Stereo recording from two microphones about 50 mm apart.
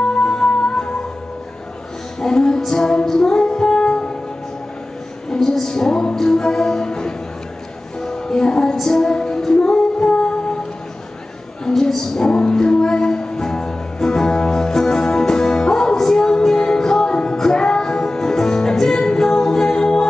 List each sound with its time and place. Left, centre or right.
0.0 s music: centre
2.1 s music: centre
5.3 s music: centre
8.8 s female singing: centre
11.6 s music: centre